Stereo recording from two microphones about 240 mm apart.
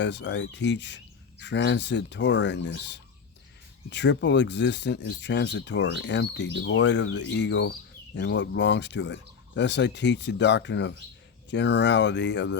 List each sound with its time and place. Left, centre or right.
0.0 s speech: left